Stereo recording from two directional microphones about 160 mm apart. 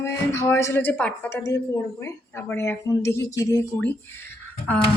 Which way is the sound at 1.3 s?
20° left (ahead or behind).